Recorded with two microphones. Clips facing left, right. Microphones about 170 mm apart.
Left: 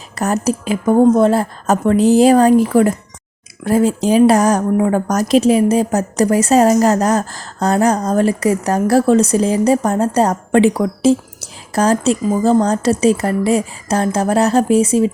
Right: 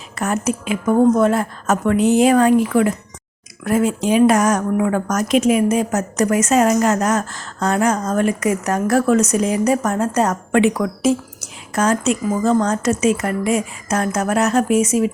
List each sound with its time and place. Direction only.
0.2 s speech: 35° left (ahead or behind)